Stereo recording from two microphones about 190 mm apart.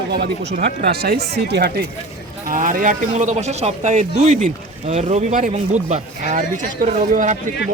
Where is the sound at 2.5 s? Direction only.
45° right (ahead or behind).